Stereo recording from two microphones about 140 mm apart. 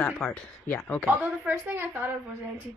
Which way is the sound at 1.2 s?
15° right (ahead or behind).